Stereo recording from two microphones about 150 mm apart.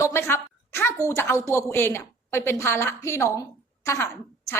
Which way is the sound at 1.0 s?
15° left (ahead or behind).